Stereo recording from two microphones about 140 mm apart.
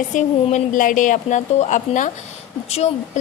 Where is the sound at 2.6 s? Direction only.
50° left (ahead or behind).